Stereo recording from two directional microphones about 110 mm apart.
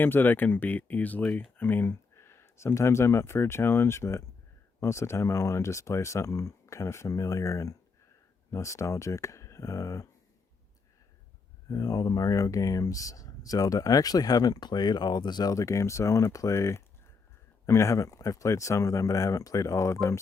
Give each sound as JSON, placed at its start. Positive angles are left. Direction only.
{"t": 0.0, "sound": "speech", "side_deg": 20}
{"t": 11.7, "sound": "speech", "side_deg": 35}
{"t": 15.5, "sound": "speech", "side_deg": 30}